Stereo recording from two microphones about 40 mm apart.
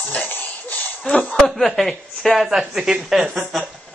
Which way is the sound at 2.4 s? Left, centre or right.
Centre.